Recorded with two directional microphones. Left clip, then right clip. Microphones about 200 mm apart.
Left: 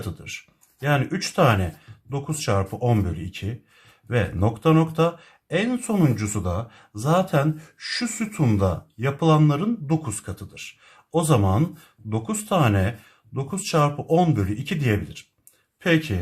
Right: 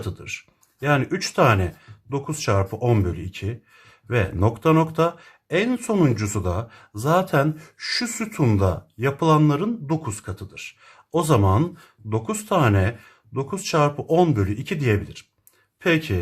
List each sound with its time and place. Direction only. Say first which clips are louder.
0.3 s speech: right 3 dB; 30° right (ahead or behind)